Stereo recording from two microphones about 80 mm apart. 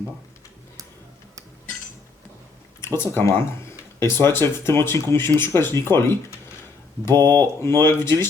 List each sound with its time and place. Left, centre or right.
2.8 s speech: left